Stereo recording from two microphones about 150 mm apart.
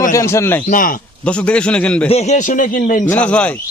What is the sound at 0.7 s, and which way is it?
Speech, 65° left (ahead or behind).